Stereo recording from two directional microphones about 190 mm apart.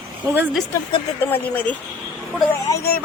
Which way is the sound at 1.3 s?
10° left (ahead or behind).